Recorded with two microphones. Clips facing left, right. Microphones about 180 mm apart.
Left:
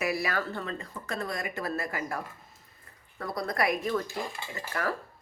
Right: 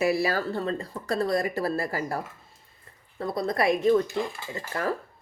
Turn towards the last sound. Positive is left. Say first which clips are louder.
# right 3 dB
turn(degrees=-25)  # may be behind; listen again after turning